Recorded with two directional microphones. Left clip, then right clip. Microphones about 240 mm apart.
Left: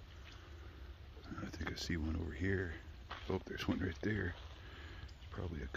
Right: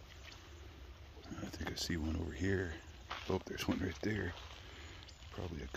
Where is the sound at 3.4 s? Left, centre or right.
Centre.